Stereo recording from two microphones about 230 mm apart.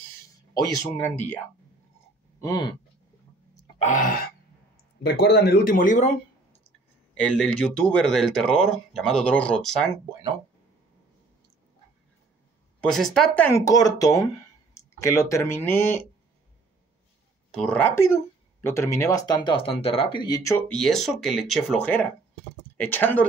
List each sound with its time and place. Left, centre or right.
0.7 s speech: centre
2.4 s speech: centre
3.7 s throat clearing: left
5.0 s speech: left
7.2 s speech: centre
12.8 s speech: centre
17.6 s speech: centre